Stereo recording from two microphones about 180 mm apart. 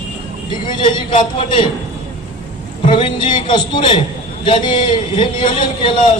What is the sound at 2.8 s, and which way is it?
A man's voice, 25° left (ahead or behind).